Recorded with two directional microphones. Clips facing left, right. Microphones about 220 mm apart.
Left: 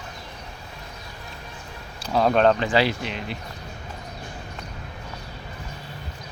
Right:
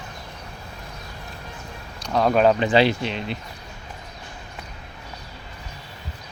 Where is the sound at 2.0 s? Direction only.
Centre (ahead or behind).